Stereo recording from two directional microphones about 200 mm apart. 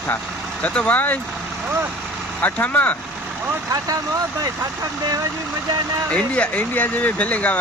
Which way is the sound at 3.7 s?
20° right (ahead or behind).